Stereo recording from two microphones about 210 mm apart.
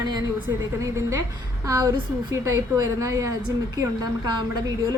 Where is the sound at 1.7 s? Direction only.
15° right (ahead or behind).